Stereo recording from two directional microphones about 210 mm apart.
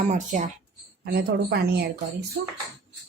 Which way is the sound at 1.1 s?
50° right (ahead or behind).